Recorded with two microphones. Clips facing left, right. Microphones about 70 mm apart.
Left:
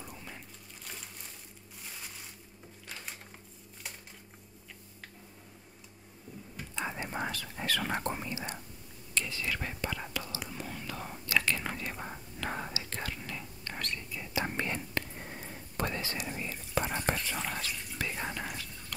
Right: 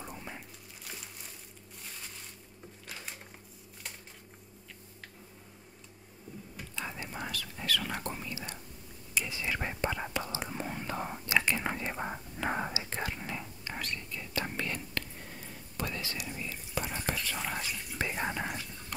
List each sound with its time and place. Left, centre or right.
0.0 s whispering: right
6.7 s whispering: left
9.1 s whispering: centre
13.7 s whispering: centre
14.3 s whispering: centre
18.0 s whispering: centre